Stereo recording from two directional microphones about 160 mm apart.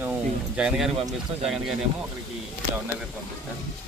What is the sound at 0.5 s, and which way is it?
Speech, 5° right (ahead or behind).